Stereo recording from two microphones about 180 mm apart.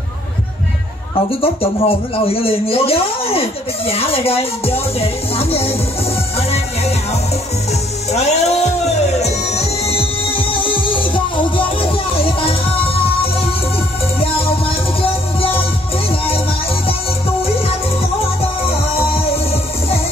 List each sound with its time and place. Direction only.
1.4 s speech: 30° left (ahead or behind)
8.1 s music: 35° left (ahead or behind)
18.4 s music: 35° left (ahead or behind)